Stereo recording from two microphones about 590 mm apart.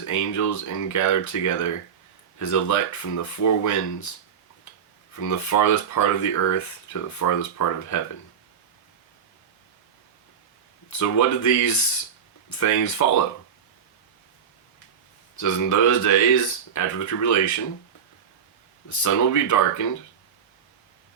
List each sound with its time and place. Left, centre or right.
0.0 s speech: left
5.2 s speech: left
10.8 s speech: left
15.4 s speech: left
18.9 s speech: left